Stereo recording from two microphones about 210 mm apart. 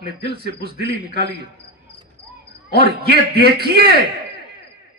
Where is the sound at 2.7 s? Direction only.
50° right (ahead or behind).